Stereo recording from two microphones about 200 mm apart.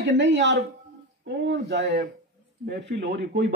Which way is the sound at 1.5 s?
55° right (ahead or behind).